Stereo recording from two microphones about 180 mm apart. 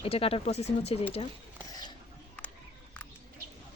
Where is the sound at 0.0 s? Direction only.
30° left (ahead or behind).